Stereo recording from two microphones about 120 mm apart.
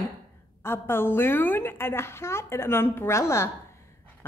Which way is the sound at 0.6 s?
20° left (ahead or behind).